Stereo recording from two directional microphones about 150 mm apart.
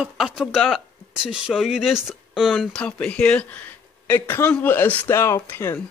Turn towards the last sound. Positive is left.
turn(degrees=15)  # may be behind; listen again after turning